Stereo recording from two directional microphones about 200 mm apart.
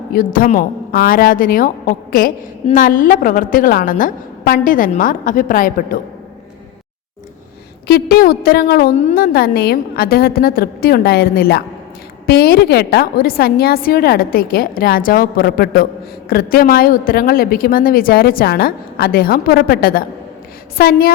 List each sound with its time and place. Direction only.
0.1 s a woman's voice: 45° left (ahead or behind)
7.9 s a woman's voice: 50° left (ahead or behind)